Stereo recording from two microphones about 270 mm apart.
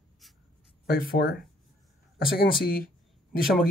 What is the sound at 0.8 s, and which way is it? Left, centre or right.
Speech, left.